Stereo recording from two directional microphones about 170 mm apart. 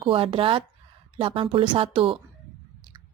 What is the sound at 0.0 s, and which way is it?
A woman's voice, 30° right (ahead or behind).